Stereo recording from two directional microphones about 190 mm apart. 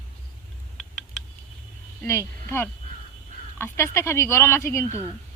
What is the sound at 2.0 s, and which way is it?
Speech, 15° left (ahead or behind).